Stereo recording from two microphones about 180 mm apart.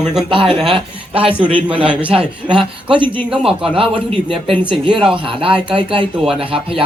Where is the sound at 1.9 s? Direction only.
10° right (ahead or behind).